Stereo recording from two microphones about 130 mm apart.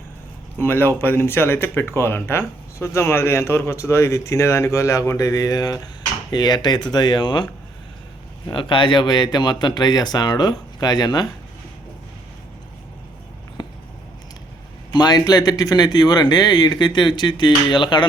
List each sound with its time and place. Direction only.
0.6 s speech: 20° left (ahead or behind); by 7.4 s 35° left (ahead or behind)
8.5 s speech: 40° left (ahead or behind)
13.6 s a sound: 30° left (ahead or behind)
14.9 s speech: 30° left (ahead or behind)